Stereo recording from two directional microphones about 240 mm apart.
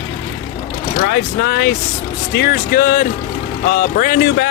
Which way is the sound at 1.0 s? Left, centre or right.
Left.